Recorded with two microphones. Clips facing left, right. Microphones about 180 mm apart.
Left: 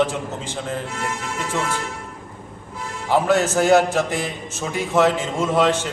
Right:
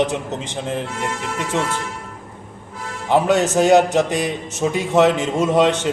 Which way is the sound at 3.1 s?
20° right (ahead or behind).